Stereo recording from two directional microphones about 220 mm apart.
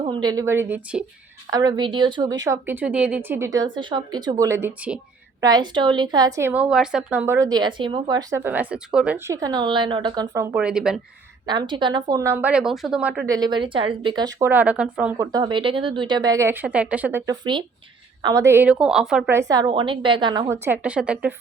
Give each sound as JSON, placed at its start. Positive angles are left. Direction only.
{"t": 0.0, "sound": "a woman's voice", "side_deg": -20}
{"t": 1.5, "sound": "a woman's voice", "side_deg": -15}
{"t": 11.4, "sound": "a woman's voice", "side_deg": -20}
{"t": 15.3, "sound": "a woman's voice", "side_deg": -20}